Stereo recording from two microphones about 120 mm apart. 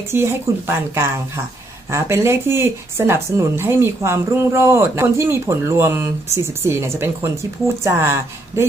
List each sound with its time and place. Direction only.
0.1 s speech: 20° right (ahead or behind)
1.9 s speech: 20° right (ahead or behind)